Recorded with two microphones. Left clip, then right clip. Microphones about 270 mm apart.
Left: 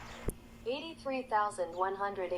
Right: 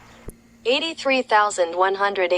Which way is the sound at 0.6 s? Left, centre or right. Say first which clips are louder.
Right 17 dB; right.